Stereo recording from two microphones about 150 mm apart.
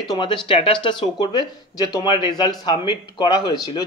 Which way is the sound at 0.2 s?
35° left (ahead or behind).